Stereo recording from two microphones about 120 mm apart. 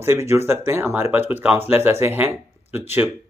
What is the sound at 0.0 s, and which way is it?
Speech, 20° right (ahead or behind).